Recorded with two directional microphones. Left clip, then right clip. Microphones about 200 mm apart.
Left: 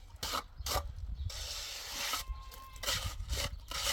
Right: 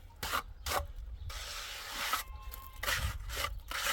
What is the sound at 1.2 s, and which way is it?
Mechanisms, 10° left (ahead or behind).